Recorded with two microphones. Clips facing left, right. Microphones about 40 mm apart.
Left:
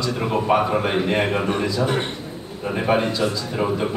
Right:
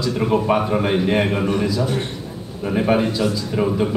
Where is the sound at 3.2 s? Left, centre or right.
Left.